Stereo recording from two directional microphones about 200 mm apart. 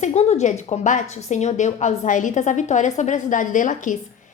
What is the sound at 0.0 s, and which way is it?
A woman's voice, 35° left (ahead or behind).